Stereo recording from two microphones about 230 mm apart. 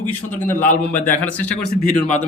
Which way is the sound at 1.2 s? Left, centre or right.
Centre.